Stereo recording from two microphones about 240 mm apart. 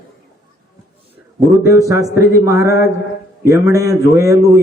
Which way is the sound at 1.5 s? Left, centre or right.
Centre.